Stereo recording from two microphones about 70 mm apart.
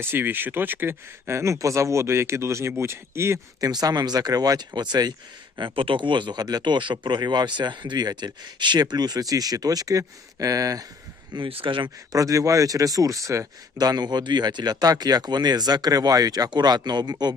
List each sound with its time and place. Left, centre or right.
0.0 s speech: right
3.6 s speech: right
6.1 s speech: right
11.3 s speech: right
12.1 s speech: right
13.7 s speech: right